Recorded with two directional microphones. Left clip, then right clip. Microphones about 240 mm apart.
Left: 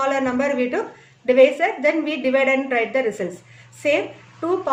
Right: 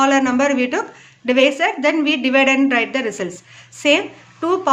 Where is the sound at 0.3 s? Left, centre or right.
Right.